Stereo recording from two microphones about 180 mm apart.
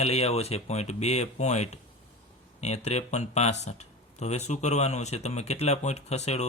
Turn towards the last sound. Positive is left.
turn(degrees=40)  # may be behind; listen again after turning